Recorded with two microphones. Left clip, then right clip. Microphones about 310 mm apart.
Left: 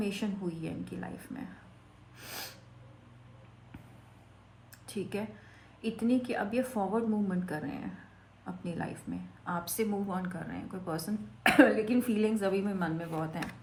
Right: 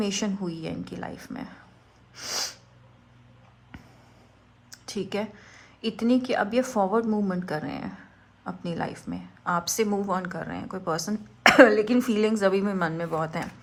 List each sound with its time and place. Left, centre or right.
0.0 s a woman's voice: right
2.1 s sneeze: right
4.7 s a sound: right
5.8 s a woman's voice: right